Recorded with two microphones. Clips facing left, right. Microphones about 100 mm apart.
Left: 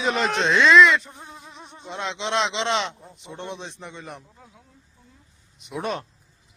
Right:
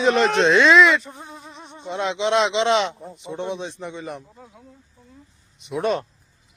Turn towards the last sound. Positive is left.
turn(degrees=0)  # may be behind; listen again after turning